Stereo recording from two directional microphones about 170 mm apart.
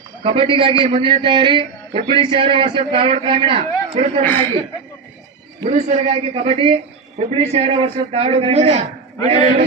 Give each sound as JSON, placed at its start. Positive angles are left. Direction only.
{"t": 0.2, "sound": "a man's voice", "side_deg": -30}
{"t": 5.6, "sound": "a man's voice", "side_deg": -40}